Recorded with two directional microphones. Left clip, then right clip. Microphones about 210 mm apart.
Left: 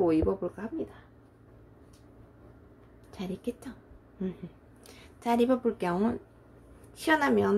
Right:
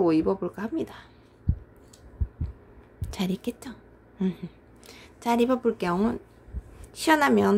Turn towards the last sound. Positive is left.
turn(degrees=-20)  # may be behind; listen again after turning